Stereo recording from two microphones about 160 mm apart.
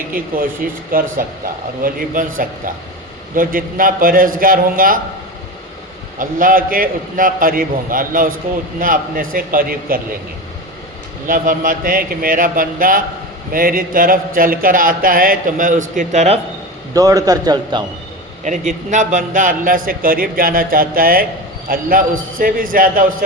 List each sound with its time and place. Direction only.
0.1 s a man's voice: 60° right (ahead or behind)
6.1 s a man's voice: 60° right (ahead or behind)
11.3 s a man's voice: 60° right (ahead or behind); by 16.4 s 45° right (ahead or behind)
16.9 s a man's voice: 20° right (ahead or behind)
18.4 s a man's voice: 50° right (ahead or behind)